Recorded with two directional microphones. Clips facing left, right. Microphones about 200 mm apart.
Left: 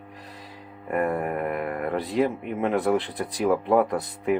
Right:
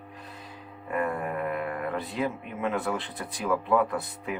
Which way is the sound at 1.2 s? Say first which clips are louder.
Left 3 dB; 60° left (ahead or behind).